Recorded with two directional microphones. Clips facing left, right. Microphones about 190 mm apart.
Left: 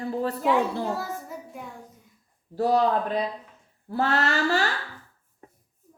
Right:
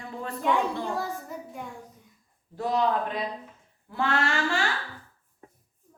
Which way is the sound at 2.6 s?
35° left (ahead or behind).